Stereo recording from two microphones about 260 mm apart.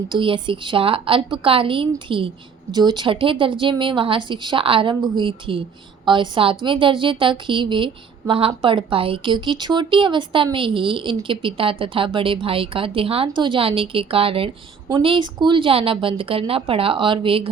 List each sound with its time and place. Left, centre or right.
0.1 s a woman's voice: centre